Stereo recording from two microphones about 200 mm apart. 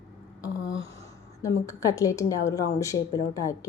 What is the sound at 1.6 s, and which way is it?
A woman's voice, 15° left (ahead or behind).